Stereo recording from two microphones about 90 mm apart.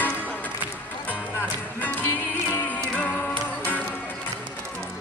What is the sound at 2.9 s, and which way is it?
Music, 20° left (ahead or behind).